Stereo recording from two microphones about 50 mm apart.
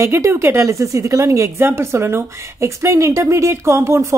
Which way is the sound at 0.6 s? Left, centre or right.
Right.